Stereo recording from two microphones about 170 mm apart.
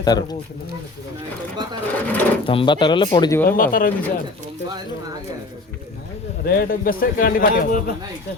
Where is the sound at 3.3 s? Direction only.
10° left (ahead or behind).